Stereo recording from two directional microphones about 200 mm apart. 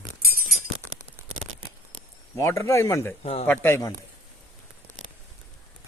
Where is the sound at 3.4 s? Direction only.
10° left (ahead or behind).